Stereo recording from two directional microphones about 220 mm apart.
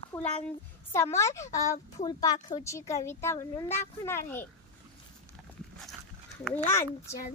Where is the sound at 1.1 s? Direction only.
15° left (ahead or behind).